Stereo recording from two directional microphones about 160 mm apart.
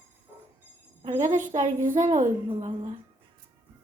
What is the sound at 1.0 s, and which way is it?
Music, 40° right (ahead or behind).